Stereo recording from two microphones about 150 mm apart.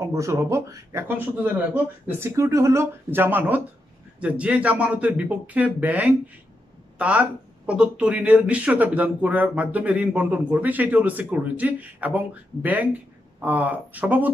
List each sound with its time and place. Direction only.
0.0 s speech: 20° right (ahead or behind)
13.4 s speech: 10° right (ahead or behind)